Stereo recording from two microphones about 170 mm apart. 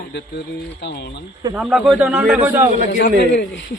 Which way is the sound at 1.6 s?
5° right (ahead or behind).